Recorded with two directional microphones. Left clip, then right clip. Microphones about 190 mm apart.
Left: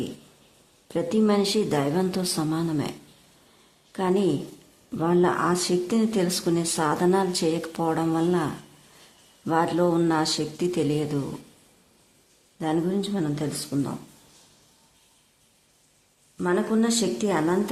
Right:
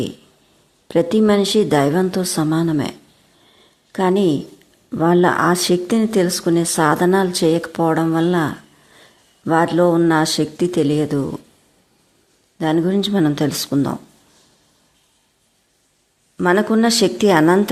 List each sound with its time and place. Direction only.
0.9 s speech: 25° right (ahead or behind)
3.9 s speech: 20° right (ahead or behind)
12.5 s speech: 25° right (ahead or behind)
16.4 s speech: 30° right (ahead or behind)